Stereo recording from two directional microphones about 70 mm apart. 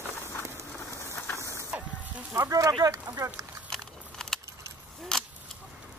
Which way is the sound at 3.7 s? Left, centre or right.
Centre.